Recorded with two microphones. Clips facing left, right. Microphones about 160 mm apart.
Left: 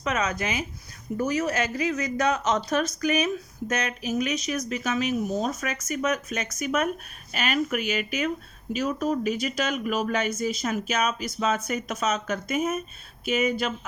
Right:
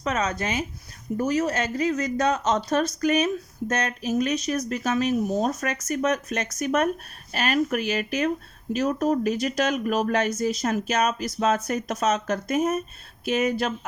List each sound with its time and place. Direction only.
0.0 s speech: 30° right (ahead or behind)